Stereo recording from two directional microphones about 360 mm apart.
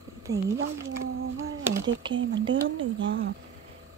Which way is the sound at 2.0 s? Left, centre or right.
Centre.